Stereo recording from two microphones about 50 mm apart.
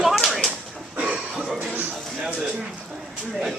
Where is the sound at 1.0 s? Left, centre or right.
Right.